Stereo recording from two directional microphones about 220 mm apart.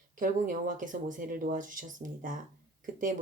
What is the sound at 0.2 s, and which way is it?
Speech, 40° right (ahead or behind).